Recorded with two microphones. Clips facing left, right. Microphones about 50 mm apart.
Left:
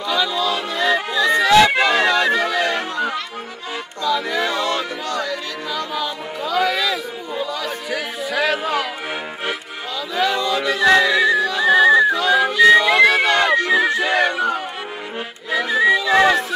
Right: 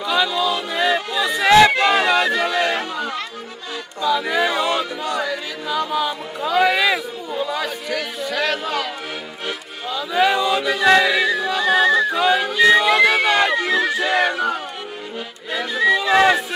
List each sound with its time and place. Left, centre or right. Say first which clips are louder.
0.0 s music: right 1 dB; centre
1.8 s a sound: even; centre
2.2 s music: left 1 dB; centre
4.0 s music: right 2 dB; centre
7.4 s a sound: right 3 dB; centre
7.9 s speech: left 2 dB; centre
9.9 s a sound: right 3 dB; centre
11.6 s speech: left 4 dB; centre
12.2 s music: left 1 dB; centre
12.6 s music: left 1 dB; centre
13.7 s music: left 2 dB; centre
16.1 s a sound: even; centre